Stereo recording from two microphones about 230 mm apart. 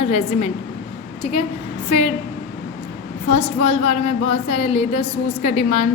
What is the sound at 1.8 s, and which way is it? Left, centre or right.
Speech, left.